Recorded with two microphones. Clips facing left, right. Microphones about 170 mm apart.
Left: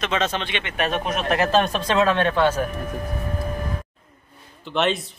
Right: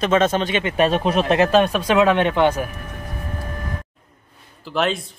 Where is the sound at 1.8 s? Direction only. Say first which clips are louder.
Right 3 dB; 15° right (ahead or behind).